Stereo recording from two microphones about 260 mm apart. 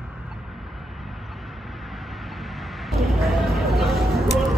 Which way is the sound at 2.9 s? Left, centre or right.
Centre.